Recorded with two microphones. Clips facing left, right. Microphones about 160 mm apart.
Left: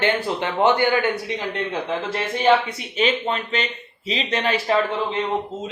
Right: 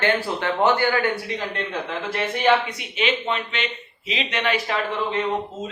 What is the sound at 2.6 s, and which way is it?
Speech, 35° left (ahead or behind).